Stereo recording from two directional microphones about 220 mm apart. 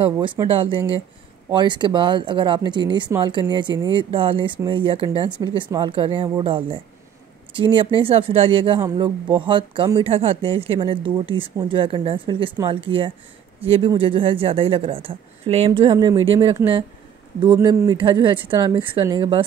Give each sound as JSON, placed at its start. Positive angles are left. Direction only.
{"t": 0.0, "sound": "speech", "side_deg": -25}